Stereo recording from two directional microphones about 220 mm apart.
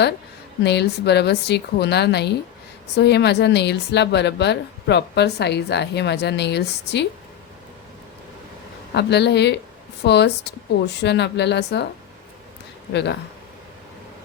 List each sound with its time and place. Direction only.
0.6 s a woman's voice: 50° left (ahead or behind)
8.9 s a woman's voice: 50° left (ahead or behind)
12.9 s a woman's voice: 50° left (ahead or behind)